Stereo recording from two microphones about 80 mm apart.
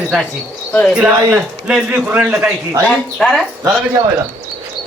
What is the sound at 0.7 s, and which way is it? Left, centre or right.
Speech, centre.